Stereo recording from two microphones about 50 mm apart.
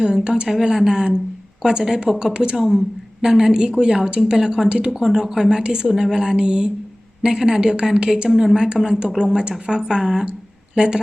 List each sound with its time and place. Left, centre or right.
0.0 s speech: centre
2.6 s speech: centre
8.3 s speech: centre